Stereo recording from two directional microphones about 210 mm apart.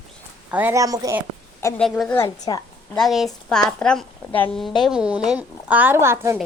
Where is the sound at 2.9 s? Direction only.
Centre (ahead or behind).